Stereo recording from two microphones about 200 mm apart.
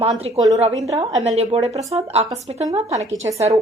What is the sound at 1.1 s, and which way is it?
A woman's voice, 30° right (ahead or behind).